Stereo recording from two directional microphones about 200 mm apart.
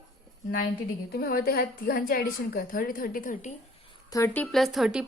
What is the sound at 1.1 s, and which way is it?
A woman's voice, 50° left (ahead or behind).